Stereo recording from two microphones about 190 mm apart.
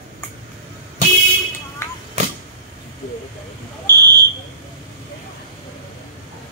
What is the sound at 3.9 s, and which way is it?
Fire alarm, 55° right (ahead or behind).